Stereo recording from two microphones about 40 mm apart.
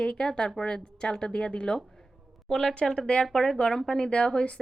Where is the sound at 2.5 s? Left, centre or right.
Centre; by 4.4 s left.